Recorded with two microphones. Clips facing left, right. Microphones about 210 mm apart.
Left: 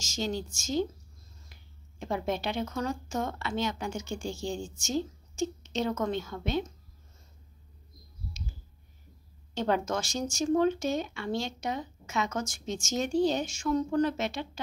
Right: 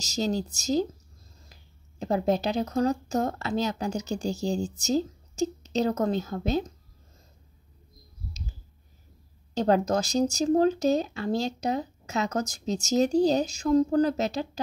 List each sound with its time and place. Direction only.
0.2 s speech: 40° right (ahead or behind)
9.5 s speech: 40° right (ahead or behind)